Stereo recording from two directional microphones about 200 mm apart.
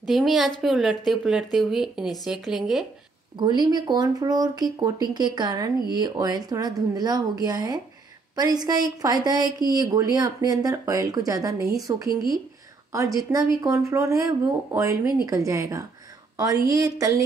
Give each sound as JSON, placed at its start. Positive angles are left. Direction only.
{"t": 0.0, "sound": "a woman's voice", "side_deg": 0}
{"t": 3.3, "sound": "speech", "side_deg": -20}